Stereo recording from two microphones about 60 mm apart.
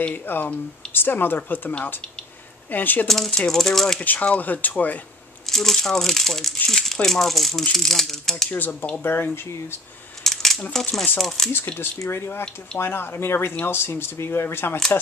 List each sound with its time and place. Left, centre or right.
0.0 s speech: left
3.1 s speech: centre
4.0 s speech: left
5.5 s speech: centre
8.5 s speech: left
10.2 s coin: centre
11.1 s speech: centre
11.5 s speech: left